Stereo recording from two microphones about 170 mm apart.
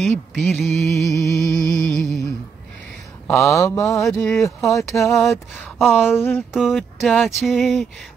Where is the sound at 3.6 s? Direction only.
20° left (ahead or behind).